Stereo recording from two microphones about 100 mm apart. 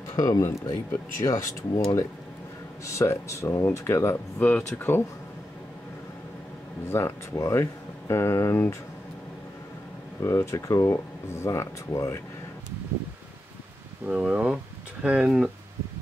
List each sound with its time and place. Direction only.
0.1 s speech: 35° left (ahead or behind)
2.8 s speech: 30° left (ahead or behind)
6.9 s speech: 25° left (ahead or behind)
10.2 s speech: 30° left (ahead or behind)
14.0 s speech: 10° right (ahead or behind)